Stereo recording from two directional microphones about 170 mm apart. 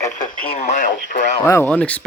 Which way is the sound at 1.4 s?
15° left (ahead or behind).